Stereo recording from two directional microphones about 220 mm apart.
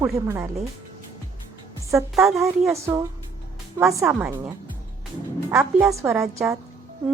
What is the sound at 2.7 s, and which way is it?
Speech, 15° right (ahead or behind).